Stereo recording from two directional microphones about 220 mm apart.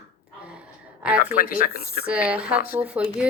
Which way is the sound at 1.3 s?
40° left (ahead or behind).